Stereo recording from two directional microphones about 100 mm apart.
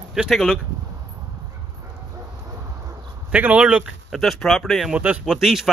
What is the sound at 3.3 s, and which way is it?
Speech, 10° right (ahead or behind).